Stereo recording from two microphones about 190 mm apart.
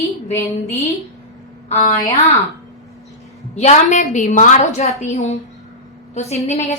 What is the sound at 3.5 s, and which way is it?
A woman's voice, 35° left (ahead or behind).